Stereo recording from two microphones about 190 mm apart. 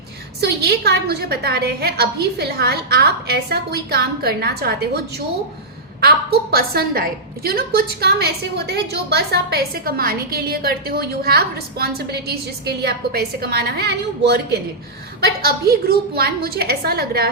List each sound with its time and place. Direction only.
0.4 s a woman's voice: 60° right (ahead or behind)
6.0 s a woman's voice: 55° right (ahead or behind)